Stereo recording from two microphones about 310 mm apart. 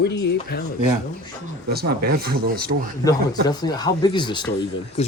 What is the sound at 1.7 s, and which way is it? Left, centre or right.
Speech, right.